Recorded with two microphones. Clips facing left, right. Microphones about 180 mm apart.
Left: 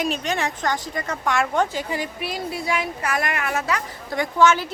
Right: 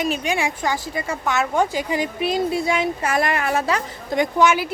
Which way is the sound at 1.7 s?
20° right (ahead or behind).